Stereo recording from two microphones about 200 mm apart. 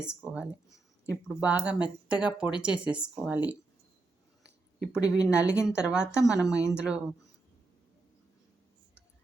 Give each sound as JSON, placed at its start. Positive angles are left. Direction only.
{"t": 0.0, "sound": "speech", "side_deg": -5}
{"t": 4.9, "sound": "speech", "side_deg": -5}